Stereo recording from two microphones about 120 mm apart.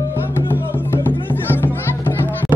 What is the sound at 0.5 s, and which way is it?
Music, 15° left (ahead or behind).